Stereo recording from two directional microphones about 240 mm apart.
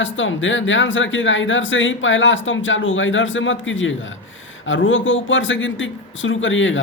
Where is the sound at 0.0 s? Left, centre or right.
Left.